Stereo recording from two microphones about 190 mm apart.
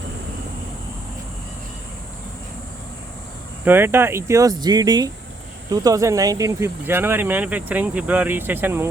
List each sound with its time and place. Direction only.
3.6 s speech: 10° right (ahead or behind)